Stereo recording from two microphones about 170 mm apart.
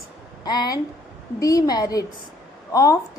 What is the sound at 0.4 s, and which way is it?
A woman's voice, 25° left (ahead or behind).